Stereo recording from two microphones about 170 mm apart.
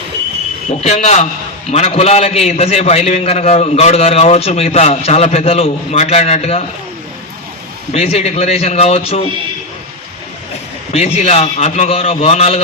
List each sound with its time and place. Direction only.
0.8 s a man's voice: 40° left (ahead or behind)
7.9 s a man's voice: 40° left (ahead or behind)
10.9 s a man's voice: 40° left (ahead or behind)